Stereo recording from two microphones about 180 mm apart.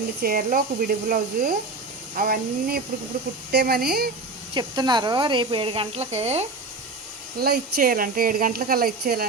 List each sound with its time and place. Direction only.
0.2 s speech: 55° right (ahead or behind)
4.5 s speech: 25° right (ahead or behind)
7.3 s speech: 60° right (ahead or behind)